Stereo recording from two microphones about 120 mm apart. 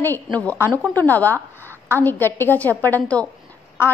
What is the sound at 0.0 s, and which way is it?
A woman's voice, 15° left (ahead or behind).